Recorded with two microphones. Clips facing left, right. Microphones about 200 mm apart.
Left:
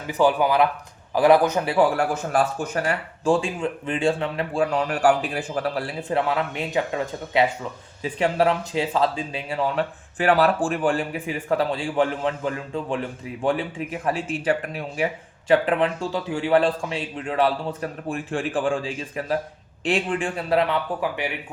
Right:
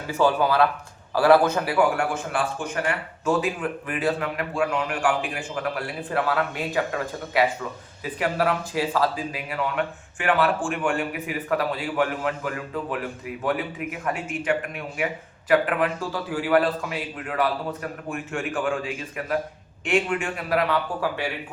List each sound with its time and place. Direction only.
0.1 s speech: 15° left (ahead or behind)